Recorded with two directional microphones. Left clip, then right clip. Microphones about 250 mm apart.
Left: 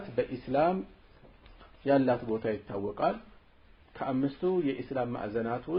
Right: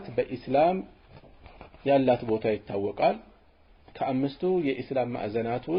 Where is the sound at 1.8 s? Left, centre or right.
Right.